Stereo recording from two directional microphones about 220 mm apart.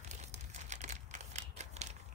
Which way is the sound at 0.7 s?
30° right (ahead or behind).